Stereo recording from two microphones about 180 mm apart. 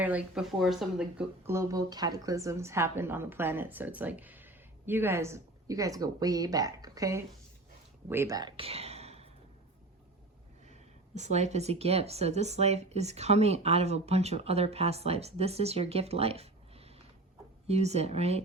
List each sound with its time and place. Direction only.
0.0 s speech: 10° right (ahead or behind)
1.5 s a woman's voice: 15° right (ahead or behind); by 9.3 s 35° right (ahead or behind)
11.1 s speech: 40° right (ahead or behind)